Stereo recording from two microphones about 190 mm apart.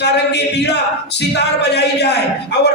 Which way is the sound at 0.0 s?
60° left (ahead or behind).